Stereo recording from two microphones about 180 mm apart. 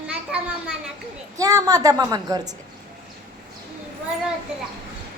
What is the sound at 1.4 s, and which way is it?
A woman's voice, 20° right (ahead or behind).